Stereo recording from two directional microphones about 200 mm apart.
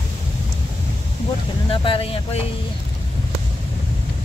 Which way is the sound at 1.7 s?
25° left (ahead or behind).